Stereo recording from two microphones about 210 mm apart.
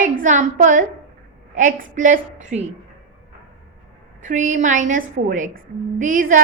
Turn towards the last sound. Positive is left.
turn(degrees=-40)  # may be behind; listen again after turning